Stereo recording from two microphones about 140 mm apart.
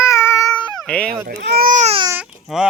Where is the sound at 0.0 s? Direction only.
20° left (ahead or behind).